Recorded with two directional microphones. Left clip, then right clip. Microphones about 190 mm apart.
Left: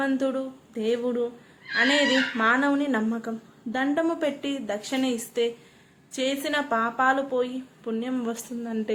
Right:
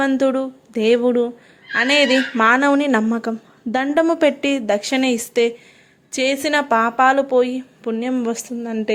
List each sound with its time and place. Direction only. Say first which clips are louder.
0.0 s speech: right 8 dB; 40° right (ahead or behind)